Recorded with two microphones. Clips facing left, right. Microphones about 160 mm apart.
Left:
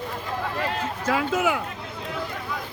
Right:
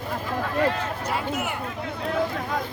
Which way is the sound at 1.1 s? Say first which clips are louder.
Left 7 dB; 90° left.